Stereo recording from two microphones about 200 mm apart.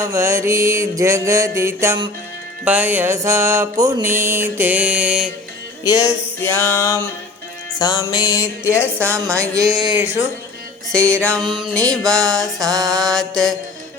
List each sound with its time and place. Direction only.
0.0 s mantra: 15° right (ahead or behind)
5.8 s music: 15° left (ahead or behind)
9.0 s mantra: 15° right (ahead or behind)
10.9 s music: 5° left (ahead or behind)
12.5 s mantra: 20° right (ahead or behind)
13.0 s music: centre (ahead or behind)